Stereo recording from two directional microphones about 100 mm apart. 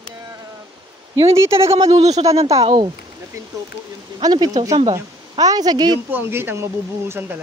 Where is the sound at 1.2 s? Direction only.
30° right (ahead or behind).